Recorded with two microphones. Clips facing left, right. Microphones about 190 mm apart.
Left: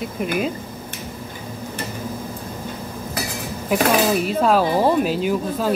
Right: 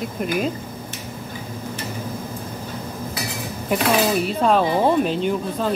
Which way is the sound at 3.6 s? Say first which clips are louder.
Left 1 dB; centre (ahead or behind).